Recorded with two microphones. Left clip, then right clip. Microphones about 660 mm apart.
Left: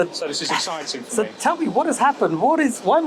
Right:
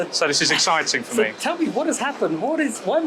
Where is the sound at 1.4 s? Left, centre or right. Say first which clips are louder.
Left 3 dB; left.